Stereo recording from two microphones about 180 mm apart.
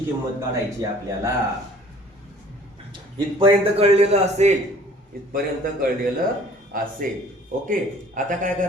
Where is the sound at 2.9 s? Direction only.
30° right (ahead or behind).